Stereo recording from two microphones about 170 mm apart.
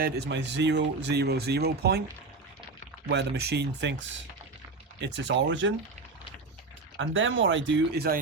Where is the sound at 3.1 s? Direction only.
80° right.